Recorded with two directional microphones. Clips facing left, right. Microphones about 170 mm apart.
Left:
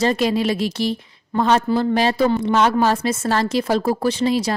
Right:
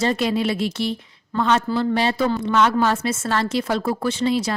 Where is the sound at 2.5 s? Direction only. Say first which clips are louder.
Left 2 dB; 35° left (ahead or behind).